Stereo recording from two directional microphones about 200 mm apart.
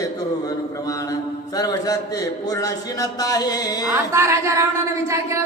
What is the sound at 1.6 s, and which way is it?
Speech, 15° left (ahead or behind).